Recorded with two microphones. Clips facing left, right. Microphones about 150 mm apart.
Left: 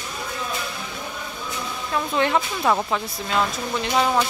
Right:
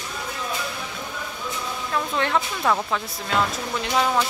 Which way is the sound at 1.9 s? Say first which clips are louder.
Left 2 dB; 10° left (ahead or behind).